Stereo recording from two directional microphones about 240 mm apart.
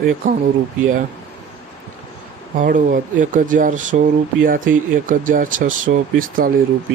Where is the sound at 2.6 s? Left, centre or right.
Right.